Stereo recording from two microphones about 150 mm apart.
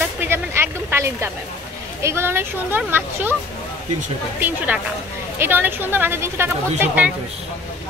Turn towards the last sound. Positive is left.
turn(degrees=-10)  # may be behind; listen again after turning